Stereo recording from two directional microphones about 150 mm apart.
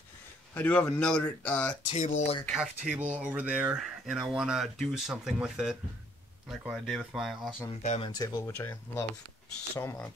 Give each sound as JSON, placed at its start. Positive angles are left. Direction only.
{"t": 0.6, "sound": "speech", "side_deg": 10}
{"t": 1.9, "sound": "speech", "side_deg": 50}
{"t": 2.5, "sound": "speech", "side_deg": -5}
{"t": 7.8, "sound": "speech", "side_deg": 50}
{"t": 8.1, "sound": "speech", "side_deg": 25}